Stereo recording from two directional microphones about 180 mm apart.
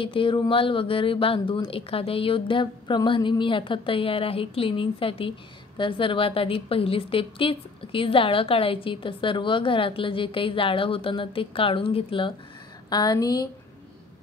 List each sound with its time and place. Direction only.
0.0 s a woman's voice: 30° left (ahead or behind)